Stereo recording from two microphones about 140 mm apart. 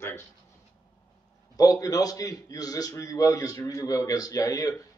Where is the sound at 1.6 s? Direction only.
25° left (ahead or behind).